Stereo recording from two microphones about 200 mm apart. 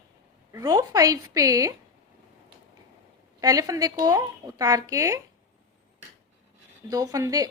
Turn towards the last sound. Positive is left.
turn(degrees=-20)  # may be behind; listen again after turning